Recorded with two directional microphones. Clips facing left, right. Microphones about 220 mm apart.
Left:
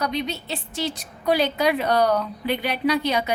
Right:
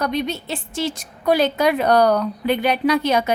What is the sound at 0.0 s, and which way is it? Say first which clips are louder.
A woman's voice: right 4 dB; 50° right (ahead or behind).